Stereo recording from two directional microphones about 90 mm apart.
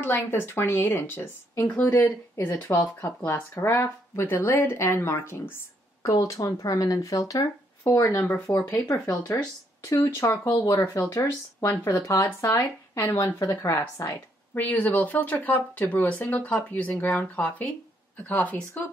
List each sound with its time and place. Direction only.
0.0 s speech: 25° left (ahead or behind)
6.0 s speech: 40° left (ahead or behind)
14.5 s speech: 20° left (ahead or behind)